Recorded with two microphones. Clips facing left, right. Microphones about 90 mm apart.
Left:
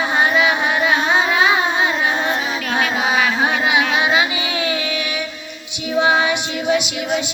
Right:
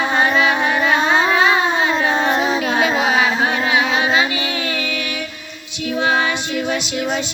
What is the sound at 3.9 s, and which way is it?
Music, 15° left (ahead or behind).